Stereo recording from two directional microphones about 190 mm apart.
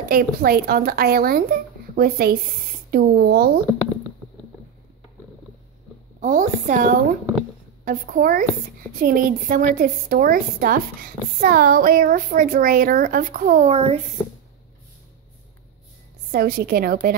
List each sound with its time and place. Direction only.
0.1 s a woman's voice: 50° right (ahead or behind)
6.2 s a woman's voice: 45° right (ahead or behind)
16.3 s a woman's voice: 50° right (ahead or behind)